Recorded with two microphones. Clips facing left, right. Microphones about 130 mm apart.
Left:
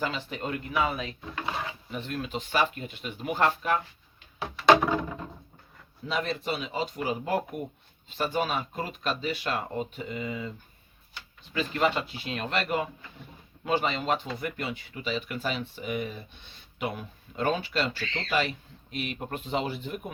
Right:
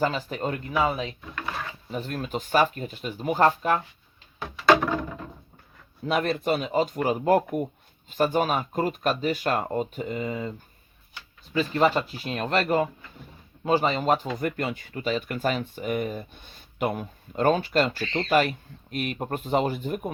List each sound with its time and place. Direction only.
0.0 s speech: 40° right (ahead or behind)
1.4 s mechanisms: 20° left (ahead or behind)
1.9 s speech: 40° right (ahead or behind)
4.4 s a sound: 15° left (ahead or behind)
6.1 s speech: 55° right (ahead or behind)
11.5 s speech: 35° right (ahead or behind)